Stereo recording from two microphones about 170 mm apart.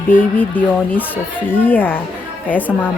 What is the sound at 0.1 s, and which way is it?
Speech, 10° left (ahead or behind).